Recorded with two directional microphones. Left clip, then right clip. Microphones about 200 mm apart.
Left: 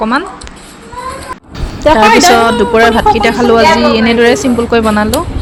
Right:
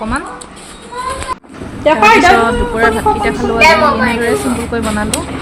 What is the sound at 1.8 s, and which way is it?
A woman's voice, 25° left (ahead or behind).